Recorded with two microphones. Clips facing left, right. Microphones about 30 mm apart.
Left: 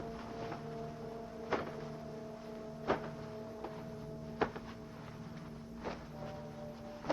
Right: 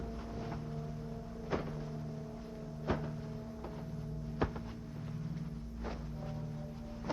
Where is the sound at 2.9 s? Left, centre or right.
Centre.